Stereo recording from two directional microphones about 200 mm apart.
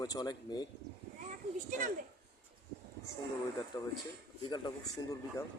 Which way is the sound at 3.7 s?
20° left (ahead or behind).